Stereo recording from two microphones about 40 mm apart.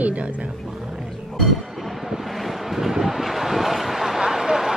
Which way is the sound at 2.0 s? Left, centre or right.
Centre.